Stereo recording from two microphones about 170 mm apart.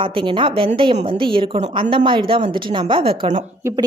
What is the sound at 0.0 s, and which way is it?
A woman's voice, 30° right (ahead or behind).